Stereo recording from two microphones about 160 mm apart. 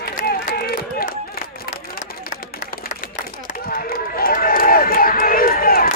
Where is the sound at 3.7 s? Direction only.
65° left (ahead or behind).